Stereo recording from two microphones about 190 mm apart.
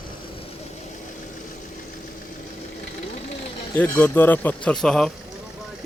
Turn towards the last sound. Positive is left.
turn(degrees=5)  # may be behind; listen again after turning